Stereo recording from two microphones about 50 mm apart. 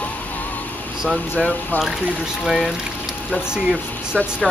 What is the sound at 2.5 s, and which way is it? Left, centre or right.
Speech, centre.